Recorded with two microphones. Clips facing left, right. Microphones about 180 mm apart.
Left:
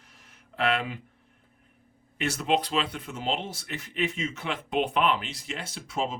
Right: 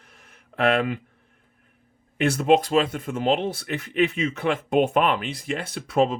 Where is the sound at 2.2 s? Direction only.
50° right (ahead or behind).